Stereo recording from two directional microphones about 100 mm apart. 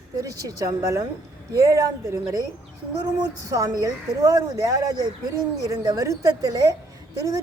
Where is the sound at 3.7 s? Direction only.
35° right (ahead or behind).